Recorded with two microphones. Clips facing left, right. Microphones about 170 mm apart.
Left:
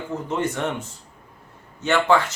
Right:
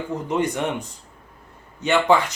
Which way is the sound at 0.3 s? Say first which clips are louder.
Right 2 dB; 15° right (ahead or behind).